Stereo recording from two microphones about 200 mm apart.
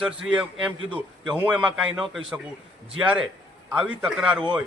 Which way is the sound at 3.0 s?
5° right (ahead or behind).